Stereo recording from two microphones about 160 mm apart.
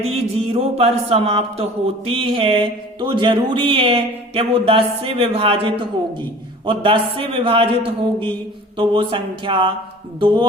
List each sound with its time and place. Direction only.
0.0 s speech: 35° right (ahead or behind)